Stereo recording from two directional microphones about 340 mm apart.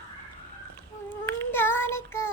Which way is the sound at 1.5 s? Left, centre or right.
Centre.